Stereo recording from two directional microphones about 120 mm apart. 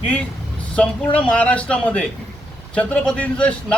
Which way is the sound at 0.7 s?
10° left (ahead or behind).